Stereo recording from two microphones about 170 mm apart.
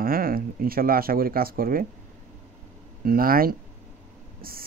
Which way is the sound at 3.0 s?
60° right (ahead or behind).